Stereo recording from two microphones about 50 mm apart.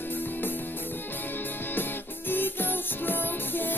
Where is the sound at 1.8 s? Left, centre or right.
Left.